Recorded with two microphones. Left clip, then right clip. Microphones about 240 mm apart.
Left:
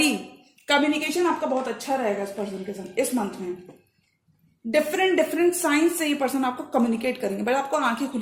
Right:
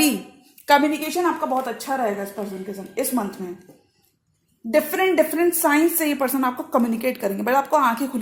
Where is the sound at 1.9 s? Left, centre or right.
Right.